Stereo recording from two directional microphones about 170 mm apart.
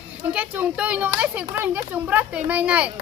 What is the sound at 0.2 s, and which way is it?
Speech, 10° right (ahead or behind).